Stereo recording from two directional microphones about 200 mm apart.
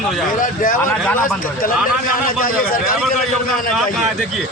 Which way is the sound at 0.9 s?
10° left (ahead or behind).